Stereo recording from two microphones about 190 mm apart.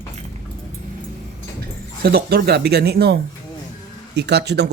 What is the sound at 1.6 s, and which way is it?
Speech, 55° right (ahead or behind).